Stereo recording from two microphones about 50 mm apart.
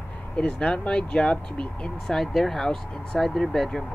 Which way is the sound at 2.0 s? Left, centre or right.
Centre.